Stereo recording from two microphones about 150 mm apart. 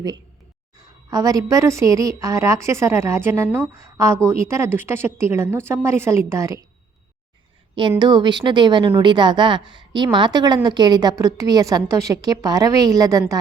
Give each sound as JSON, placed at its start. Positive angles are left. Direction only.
{"t": 1.1, "sound": "a woman's voice", "side_deg": -25}
{"t": 7.8, "sound": "a woman's voice", "side_deg": -30}